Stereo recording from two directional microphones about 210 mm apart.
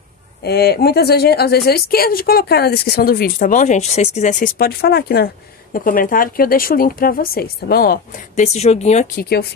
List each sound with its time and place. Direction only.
0.4 s a woman's voice: 50° left (ahead or behind)